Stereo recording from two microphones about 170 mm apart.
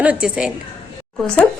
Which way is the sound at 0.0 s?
5° right (ahead or behind).